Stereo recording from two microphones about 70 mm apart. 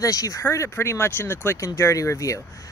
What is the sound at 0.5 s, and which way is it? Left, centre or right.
Speech, left.